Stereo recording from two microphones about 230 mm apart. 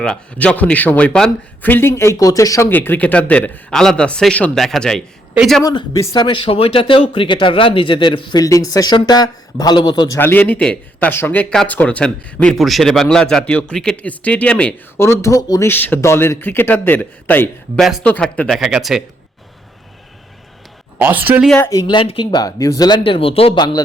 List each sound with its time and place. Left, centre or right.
0.0 s speech: centre
5.6 s speech: centre
21.0 s speech: centre
21.6 s speech: centre